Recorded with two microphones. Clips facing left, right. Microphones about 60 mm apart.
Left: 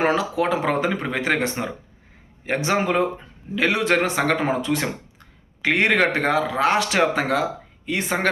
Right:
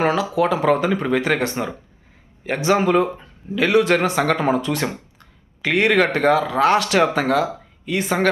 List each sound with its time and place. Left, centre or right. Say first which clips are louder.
0.0 s speech: right 2 dB; left